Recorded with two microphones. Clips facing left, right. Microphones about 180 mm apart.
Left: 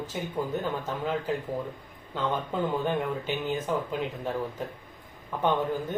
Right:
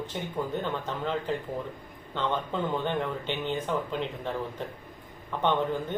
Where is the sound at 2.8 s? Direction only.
5° left (ahead or behind).